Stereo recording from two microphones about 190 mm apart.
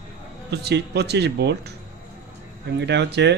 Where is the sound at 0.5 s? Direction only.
60° right (ahead or behind).